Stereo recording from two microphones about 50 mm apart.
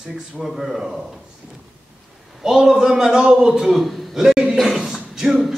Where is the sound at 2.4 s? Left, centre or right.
Centre.